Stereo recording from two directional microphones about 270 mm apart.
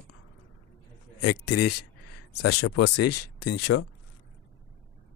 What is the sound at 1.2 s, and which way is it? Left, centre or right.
Speech, left.